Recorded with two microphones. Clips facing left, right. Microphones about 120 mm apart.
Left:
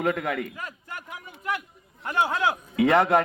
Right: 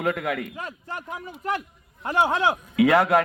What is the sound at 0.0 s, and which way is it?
Speech, 5° right (ahead or behind).